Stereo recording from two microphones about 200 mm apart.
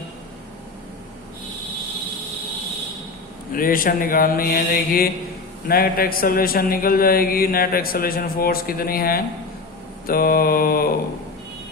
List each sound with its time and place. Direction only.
3.5 s a man's voice: 45° left (ahead or behind)